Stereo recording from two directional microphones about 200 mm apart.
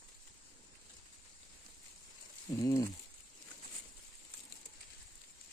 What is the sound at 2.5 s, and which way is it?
Speech, 15° left (ahead or behind).